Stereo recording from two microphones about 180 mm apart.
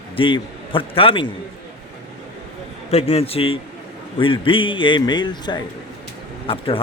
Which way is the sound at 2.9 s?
35° left (ahead or behind).